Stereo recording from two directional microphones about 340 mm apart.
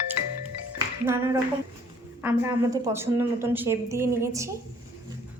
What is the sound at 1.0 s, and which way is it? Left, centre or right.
A woman's voice, centre.